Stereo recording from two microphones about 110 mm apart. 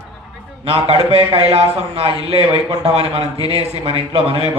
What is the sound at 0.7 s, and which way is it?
Speech, 60° right (ahead or behind).